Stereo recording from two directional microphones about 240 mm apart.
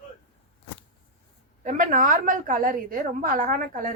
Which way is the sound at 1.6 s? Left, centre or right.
Right.